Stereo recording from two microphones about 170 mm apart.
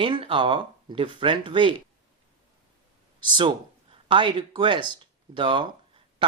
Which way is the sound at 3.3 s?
30° right (ahead or behind).